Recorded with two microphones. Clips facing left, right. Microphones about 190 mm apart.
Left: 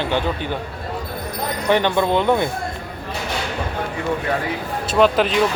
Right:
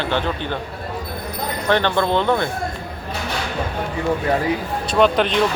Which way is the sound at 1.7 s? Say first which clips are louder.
Left 1 dB; 15° left (ahead or behind).